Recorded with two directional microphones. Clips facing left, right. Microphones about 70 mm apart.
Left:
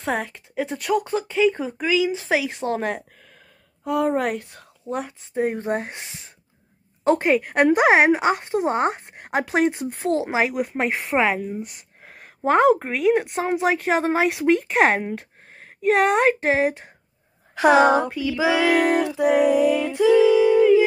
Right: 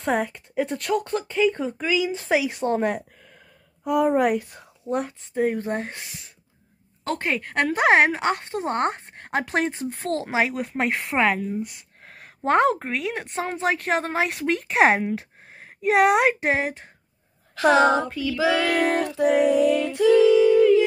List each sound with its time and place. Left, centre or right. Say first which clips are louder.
0.0 s a woman's voice: right 2 dB; centre
5.5 s speech: left 2 dB; centre
5.9 s speech: left 1 dB; left
7.1 s child singing: left 8 dB; centre
9.0 s speech: left 2 dB; centre
9.7 s child singing: left 4 dB; centre
9.9 s a woman's voice: even; centre
17.6 s child singing: left 2 dB; centre